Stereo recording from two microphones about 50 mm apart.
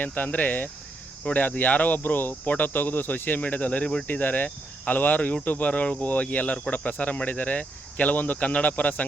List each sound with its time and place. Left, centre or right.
0.0 s speech: left